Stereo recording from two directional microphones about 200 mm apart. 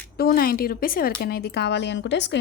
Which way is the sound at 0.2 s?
50° left (ahead or behind).